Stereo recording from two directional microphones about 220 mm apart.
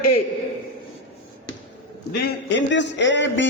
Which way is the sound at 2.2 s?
55° left (ahead or behind).